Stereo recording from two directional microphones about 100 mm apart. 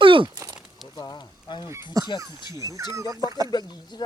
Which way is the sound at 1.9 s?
40° right (ahead or behind).